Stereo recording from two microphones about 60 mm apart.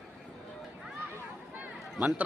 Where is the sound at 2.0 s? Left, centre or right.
Right.